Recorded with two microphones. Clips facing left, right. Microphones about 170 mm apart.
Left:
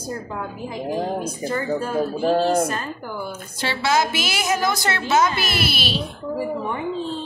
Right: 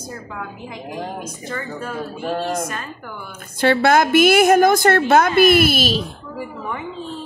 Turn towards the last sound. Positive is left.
turn(degrees=-45)  # may be behind; listen again after turning